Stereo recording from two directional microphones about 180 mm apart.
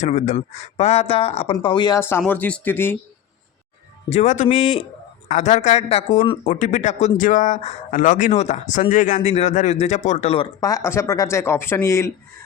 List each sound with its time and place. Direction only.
0.0 s speech: 40° left (ahead or behind); by 2.0 s 25° left (ahead or behind)
2.0 s speech: 15° left (ahead or behind)
4.1 s speech: 40° left (ahead or behind); by 12.1 s 15° left (ahead or behind)